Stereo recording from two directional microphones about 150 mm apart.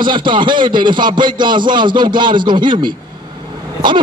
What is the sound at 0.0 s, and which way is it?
A man's voice, 30° right (ahead or behind).